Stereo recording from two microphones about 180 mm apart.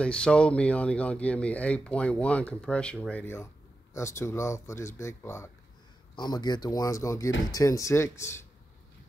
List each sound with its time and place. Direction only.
0.0 s speech: 5° left (ahead or behind)